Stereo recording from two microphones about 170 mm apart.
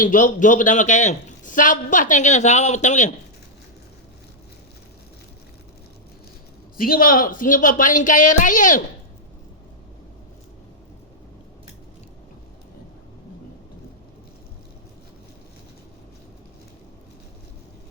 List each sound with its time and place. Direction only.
0.0 s a man's voice: 50° left (ahead or behind)
6.7 s a man's voice: 60° left (ahead or behind)